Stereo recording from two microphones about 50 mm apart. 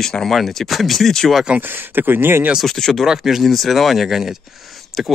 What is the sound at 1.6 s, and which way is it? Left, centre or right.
Speech, right.